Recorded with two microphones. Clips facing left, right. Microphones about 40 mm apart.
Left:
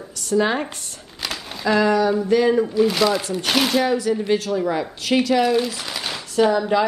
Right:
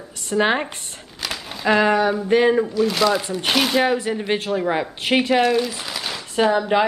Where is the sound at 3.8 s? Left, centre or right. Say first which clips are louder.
Even; right.